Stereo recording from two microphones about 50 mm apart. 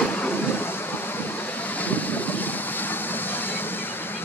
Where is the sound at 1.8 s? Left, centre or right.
Left.